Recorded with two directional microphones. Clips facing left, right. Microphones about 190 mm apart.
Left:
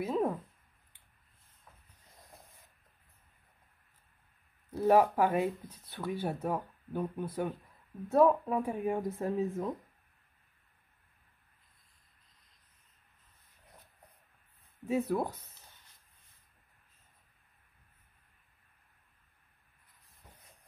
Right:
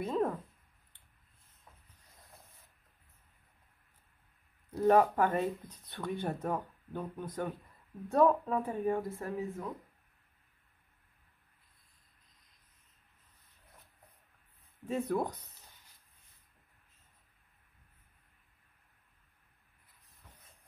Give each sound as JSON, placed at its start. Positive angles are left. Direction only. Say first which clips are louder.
{"t": 0.0, "sound": "a sound", "louder": "left 1 dB", "side_deg": 10}
{"t": 4.7, "sound": "speech", "louder": "left 1 dB", "side_deg": 10}
{"t": 14.9, "sound": "speech", "louder": "left 2 dB", "side_deg": 5}